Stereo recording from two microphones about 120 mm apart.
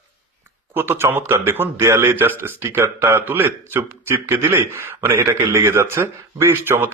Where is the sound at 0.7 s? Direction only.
20° right (ahead or behind).